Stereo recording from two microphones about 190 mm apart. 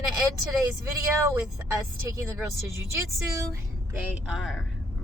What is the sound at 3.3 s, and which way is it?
Speech, 15° right (ahead or behind).